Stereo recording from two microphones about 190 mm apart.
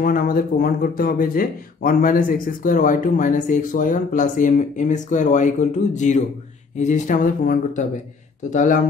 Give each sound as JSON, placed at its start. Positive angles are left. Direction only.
{"t": 0.0, "sound": "speech", "side_deg": 50}